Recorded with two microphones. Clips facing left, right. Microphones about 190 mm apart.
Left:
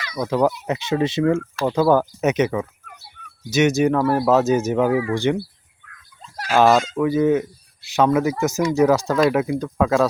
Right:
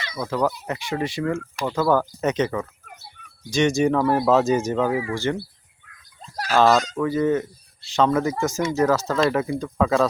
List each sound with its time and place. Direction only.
0.2 s speech: 20° left (ahead or behind)
6.2 s fowl: 40° right (ahead or behind)
6.5 s speech: 10° left (ahead or behind)